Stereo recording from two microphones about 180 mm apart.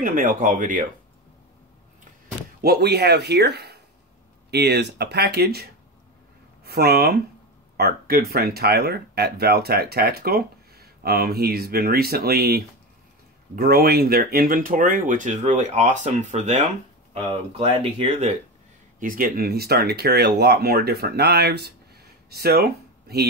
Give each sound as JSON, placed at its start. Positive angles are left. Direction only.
{"t": 0.0, "sound": "speech", "side_deg": -50}
{"t": 2.6, "sound": "speech", "side_deg": -65}
{"t": 18.9, "sound": "speech", "side_deg": -50}